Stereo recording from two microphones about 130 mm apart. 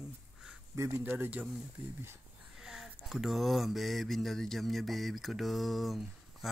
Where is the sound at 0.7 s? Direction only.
25° right (ahead or behind).